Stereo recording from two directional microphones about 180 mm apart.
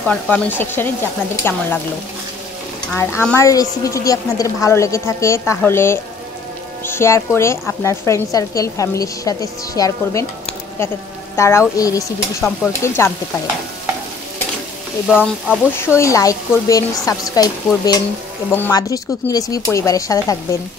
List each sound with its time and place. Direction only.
0.0 s a woman's voice: 5° left (ahead or behind)
3.2 s a woman's voice: 15° left (ahead or behind)
11.3 s a woman's voice: 15° left (ahead or behind)
15.0 s speech: 5° right (ahead or behind)
16.0 s speech: 20° left (ahead or behind)